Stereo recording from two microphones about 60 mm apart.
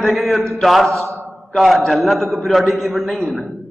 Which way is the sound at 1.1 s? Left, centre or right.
Right.